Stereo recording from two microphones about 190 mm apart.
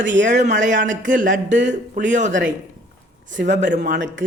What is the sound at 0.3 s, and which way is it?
Speech, 40° right (ahead or behind).